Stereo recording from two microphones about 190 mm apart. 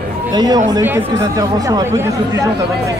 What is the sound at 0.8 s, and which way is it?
Speech, 15° right (ahead or behind).